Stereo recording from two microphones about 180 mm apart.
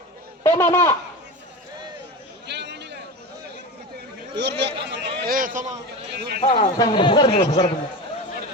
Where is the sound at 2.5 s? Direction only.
70° right (ahead or behind).